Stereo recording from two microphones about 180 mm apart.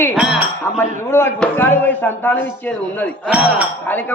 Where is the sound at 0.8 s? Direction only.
15° left (ahead or behind).